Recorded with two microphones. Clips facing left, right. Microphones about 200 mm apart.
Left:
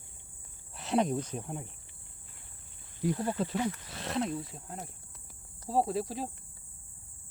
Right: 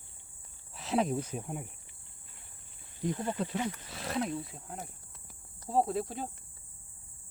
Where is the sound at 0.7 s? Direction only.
Centre (ahead or behind).